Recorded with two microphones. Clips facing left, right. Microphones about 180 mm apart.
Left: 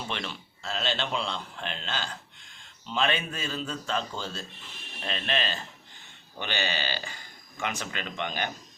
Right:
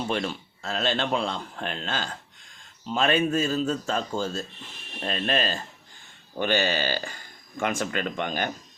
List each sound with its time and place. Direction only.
0.1 s speech: 45° right (ahead or behind)